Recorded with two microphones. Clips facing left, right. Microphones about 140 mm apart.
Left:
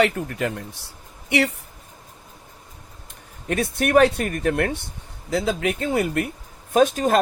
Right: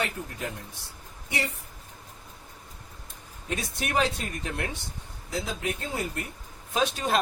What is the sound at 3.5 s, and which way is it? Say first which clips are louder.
Speech: left 10 dB; 60° left (ahead or behind).